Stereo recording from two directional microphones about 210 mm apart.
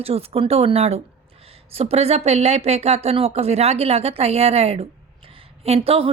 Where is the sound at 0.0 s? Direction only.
30° right (ahead or behind).